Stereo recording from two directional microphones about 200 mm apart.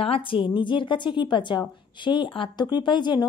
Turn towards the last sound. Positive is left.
turn(degrees=20)  # may be behind; listen again after turning